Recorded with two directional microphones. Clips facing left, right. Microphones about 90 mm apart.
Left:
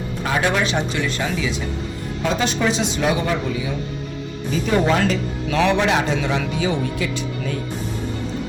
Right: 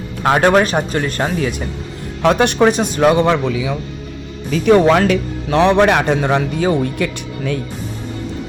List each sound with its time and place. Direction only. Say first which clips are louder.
0.2 s speech: right 8 dB; 65° right (ahead or behind)
2.2 s speech: right 8 dB; 65° right (ahead or behind)